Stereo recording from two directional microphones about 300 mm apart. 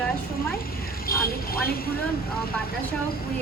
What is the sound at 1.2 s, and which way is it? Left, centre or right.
Speech, left.